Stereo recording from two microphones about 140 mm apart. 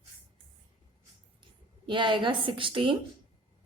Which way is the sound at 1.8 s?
35° right (ahead or behind).